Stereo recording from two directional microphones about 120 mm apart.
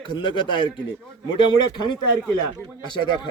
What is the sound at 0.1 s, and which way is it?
A man's voice, 40° left (ahead or behind).